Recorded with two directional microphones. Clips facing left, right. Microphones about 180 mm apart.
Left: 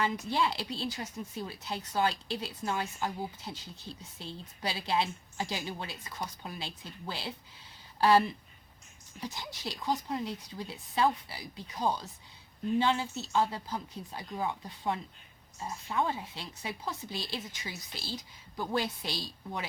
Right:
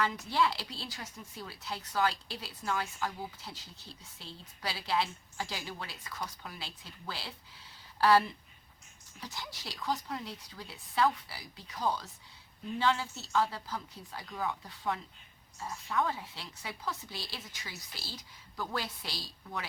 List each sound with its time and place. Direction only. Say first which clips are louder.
0.0 s speech: even; 20° left (ahead or behind)